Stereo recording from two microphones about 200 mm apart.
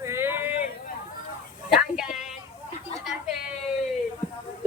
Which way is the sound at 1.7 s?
5° right (ahead or behind).